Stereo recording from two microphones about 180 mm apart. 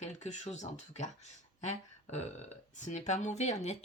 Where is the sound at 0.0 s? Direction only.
40° left (ahead or behind).